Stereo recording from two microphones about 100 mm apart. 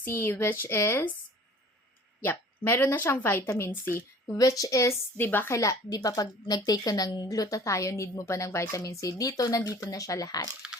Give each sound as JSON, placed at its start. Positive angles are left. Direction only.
{"t": 0.0, "sound": "speech", "side_deg": 25}
{"t": 2.2, "sound": "speech", "side_deg": 20}
{"t": 4.4, "sound": "speech", "side_deg": 35}
{"t": 5.5, "sound": "a woman's voice", "side_deg": 35}